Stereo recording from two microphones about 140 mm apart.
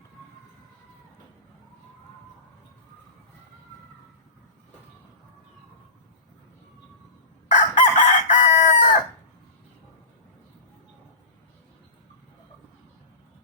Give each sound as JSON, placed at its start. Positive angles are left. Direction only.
{"t": 7.5, "sound": "chicken", "side_deg": 60}